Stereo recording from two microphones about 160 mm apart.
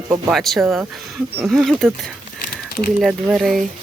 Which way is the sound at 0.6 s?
15° right (ahead or behind).